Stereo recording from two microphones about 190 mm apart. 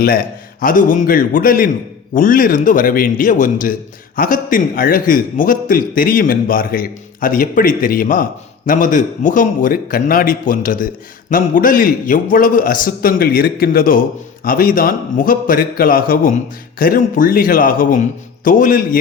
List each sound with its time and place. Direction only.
0.0 s a man's voice: 50° left (ahead or behind)